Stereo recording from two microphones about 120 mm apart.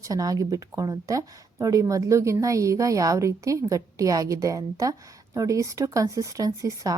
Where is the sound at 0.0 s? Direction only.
30° right (ahead or behind).